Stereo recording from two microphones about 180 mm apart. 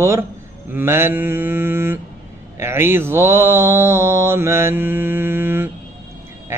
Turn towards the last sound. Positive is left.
turn(degrees=-10)  # may be behind; listen again after turning